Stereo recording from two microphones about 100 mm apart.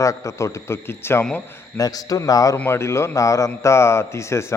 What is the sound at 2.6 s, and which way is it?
A man's voice, 25° left (ahead or behind).